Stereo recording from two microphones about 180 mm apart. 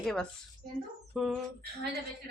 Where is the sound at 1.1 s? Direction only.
5° right (ahead or behind).